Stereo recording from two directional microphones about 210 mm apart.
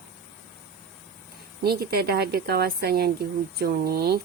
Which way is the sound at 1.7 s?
50° right (ahead or behind).